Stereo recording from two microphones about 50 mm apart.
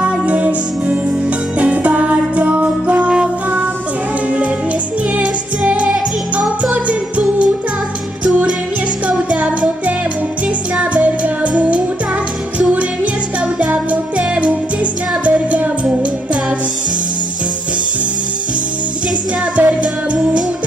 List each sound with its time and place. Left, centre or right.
0.0 s music: right
5.1 s music: right
6.6 s jingle bell: right
8.2 s music: right
13.6 s music: right
19.5 s music: right